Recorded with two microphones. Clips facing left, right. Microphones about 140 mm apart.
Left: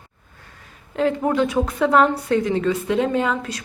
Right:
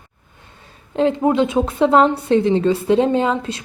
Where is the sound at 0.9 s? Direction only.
25° right (ahead or behind).